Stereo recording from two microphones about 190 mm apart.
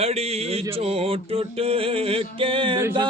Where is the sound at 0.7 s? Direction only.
30° right (ahead or behind).